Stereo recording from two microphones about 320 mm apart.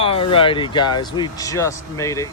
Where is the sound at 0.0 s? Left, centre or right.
Centre.